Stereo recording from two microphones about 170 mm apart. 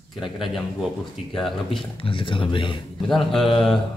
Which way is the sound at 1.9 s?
30° left (ahead or behind).